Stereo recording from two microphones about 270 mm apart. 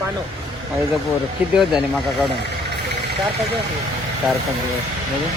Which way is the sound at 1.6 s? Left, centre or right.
Centre.